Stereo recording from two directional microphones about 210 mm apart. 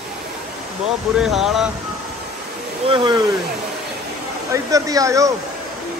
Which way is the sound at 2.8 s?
20° right (ahead or behind).